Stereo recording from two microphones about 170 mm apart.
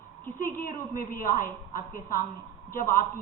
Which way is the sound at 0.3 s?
55° left (ahead or behind).